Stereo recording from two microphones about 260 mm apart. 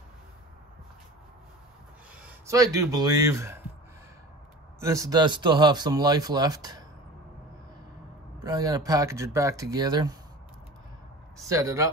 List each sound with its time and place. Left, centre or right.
2.2 s speech: centre
4.7 s speech: centre
8.5 s speech: centre
11.4 s speech: centre